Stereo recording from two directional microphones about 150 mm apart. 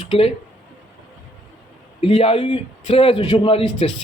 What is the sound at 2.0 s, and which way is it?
A man's voice, 35° left (ahead or behind).